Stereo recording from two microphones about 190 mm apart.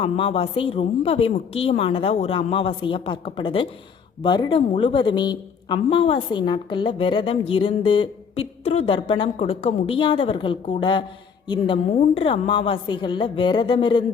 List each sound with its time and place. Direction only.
0.0 s a woman's voice: 30° left (ahead or behind)